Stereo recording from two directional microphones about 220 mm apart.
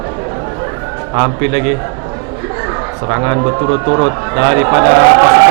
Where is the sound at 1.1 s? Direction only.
20° right (ahead or behind).